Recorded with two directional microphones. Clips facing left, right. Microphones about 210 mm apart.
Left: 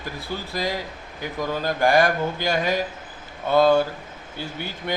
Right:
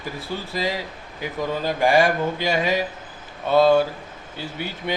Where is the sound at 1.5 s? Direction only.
5° right (ahead or behind).